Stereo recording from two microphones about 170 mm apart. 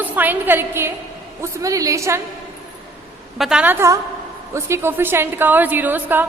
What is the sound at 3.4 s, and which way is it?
A woman's voice, 5° right (ahead or behind).